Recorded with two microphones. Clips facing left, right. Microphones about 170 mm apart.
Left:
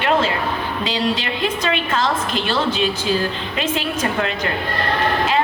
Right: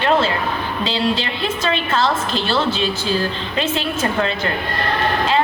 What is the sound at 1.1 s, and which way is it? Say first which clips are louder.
A woman's voice: even; 15° left (ahead or behind).